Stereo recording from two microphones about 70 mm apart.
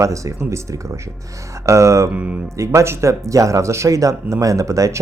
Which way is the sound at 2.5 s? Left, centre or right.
Right.